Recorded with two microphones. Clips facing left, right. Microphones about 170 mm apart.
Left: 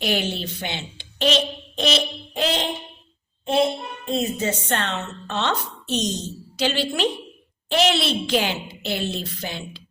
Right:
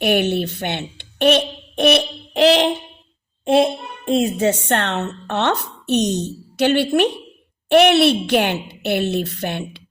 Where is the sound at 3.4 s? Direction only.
85° right.